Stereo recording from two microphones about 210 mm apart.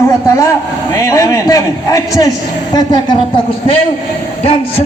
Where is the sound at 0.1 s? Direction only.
15° left (ahead or behind).